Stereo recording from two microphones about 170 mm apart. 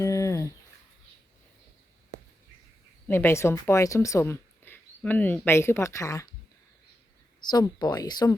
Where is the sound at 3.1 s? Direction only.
15° left (ahead or behind).